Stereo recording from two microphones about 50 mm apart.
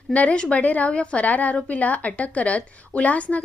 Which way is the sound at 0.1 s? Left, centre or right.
Left.